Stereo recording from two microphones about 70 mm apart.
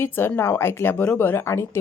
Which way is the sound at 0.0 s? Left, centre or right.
Left.